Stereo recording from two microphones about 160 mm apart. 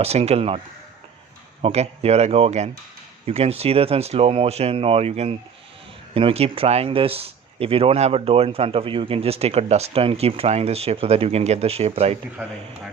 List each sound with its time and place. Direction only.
0.0 s speech: 40° right (ahead or behind)
1.6 s speech: 40° right (ahead or behind)